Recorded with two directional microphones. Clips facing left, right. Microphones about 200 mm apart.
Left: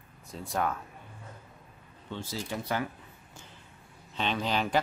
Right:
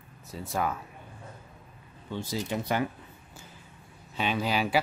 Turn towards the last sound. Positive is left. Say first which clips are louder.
# right 2 dB
turn(degrees=-10)  # may be behind; listen again after turning